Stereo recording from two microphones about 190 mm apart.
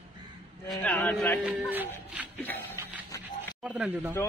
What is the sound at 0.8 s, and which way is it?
Speech, 10° left (ahead or behind).